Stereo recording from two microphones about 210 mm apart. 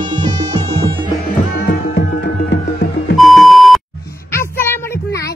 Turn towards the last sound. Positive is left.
turn(degrees=10)  # may be behind; listen again after turning